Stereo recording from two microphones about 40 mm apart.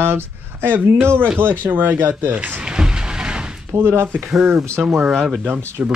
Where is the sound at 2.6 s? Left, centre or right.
Right.